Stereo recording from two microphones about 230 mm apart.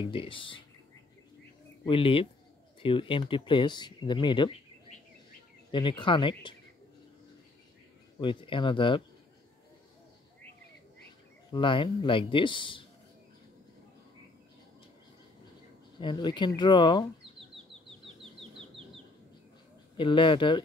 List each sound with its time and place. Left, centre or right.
0.0 s speech: left
1.9 s speech: left
5.7 s speech: left
8.2 s speech: left
11.5 s speech: left
16.0 s speech: centre
18.0 s chicken: right
20.0 s speech: left